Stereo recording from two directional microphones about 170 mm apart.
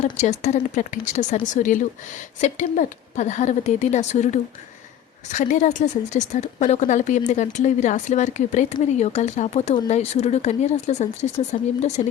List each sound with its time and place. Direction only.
0.0 s speech: 45° left (ahead or behind)